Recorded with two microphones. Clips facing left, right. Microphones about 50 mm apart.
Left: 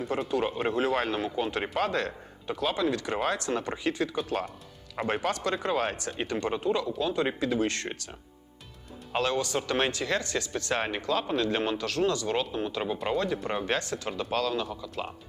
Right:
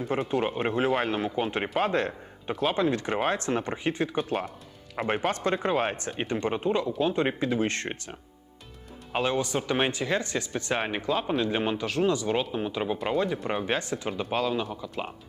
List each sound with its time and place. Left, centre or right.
0.3 s speech: right
5.3 s speech: right
9.1 s speech: centre